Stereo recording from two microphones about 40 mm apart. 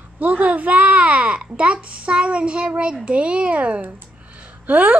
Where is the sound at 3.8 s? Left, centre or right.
Right.